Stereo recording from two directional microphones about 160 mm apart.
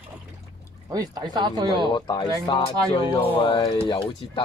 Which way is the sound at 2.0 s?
30° left (ahead or behind).